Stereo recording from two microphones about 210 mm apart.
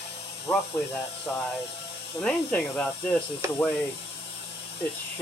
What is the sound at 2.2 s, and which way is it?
Speech, 5° left (ahead or behind).